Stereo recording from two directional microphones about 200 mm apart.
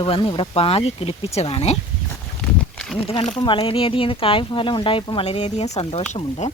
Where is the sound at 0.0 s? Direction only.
25° left (ahead or behind).